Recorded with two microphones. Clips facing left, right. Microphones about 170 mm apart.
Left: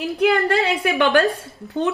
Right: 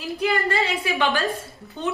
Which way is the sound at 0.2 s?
65° left (ahead or behind).